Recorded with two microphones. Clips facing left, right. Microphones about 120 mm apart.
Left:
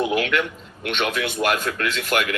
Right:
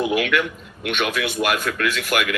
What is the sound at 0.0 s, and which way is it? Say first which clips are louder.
A man's voice: right 1 dB; 30° left (ahead or behind).